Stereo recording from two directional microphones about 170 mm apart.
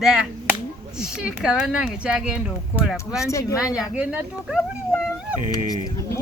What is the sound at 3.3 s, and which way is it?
Speech, 20° left (ahead or behind).